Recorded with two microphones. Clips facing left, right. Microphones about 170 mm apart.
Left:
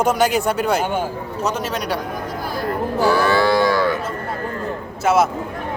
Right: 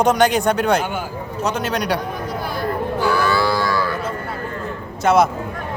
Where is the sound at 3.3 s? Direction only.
20° left (ahead or behind).